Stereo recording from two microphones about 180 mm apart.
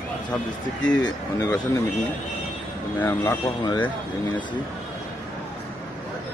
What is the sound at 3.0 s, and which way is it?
Speech, 10° left (ahead or behind).